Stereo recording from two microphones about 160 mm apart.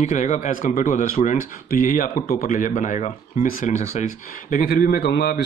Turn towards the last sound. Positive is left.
turn(degrees=90)